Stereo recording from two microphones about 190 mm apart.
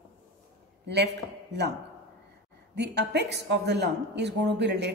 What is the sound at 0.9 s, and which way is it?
Speech, 65° right (ahead or behind).